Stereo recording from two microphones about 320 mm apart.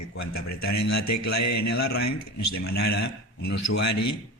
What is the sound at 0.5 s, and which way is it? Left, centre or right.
A man's voice, left.